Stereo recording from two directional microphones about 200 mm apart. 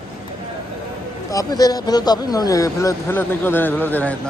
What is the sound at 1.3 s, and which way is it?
Speech, 20° left (ahead or behind).